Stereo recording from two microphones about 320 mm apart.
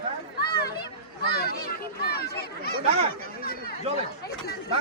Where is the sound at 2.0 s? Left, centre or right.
Left.